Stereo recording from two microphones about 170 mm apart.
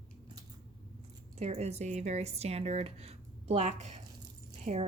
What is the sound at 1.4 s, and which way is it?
Speech, 40° right (ahead or behind).